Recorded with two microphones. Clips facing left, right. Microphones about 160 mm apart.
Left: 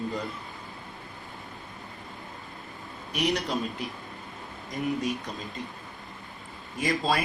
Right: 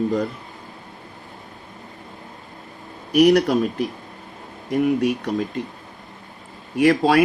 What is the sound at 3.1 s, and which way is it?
Speech, 75° right (ahead or behind).